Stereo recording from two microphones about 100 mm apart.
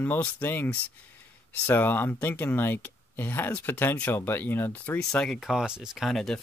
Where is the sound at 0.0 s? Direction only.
20° left (ahead or behind).